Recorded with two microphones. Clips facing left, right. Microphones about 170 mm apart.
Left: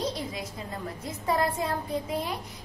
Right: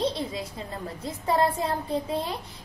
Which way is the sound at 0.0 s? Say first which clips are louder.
Right 4 dB; 30° right (ahead or behind).